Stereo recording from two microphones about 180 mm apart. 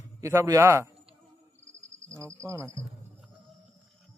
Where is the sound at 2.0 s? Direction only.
15° right (ahead or behind).